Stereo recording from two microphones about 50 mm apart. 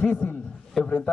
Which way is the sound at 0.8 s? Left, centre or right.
Centre.